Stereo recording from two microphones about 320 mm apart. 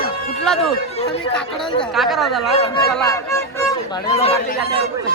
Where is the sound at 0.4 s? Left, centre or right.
Centre.